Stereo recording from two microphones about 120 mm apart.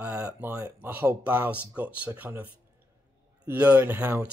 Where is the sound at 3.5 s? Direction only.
15° right (ahead or behind).